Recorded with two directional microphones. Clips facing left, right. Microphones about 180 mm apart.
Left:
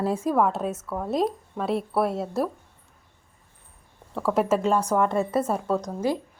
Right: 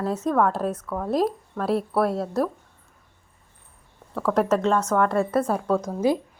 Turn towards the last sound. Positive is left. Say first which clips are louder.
# right 3 dB
turn(degrees=-10)  # may be behind; listen again after turning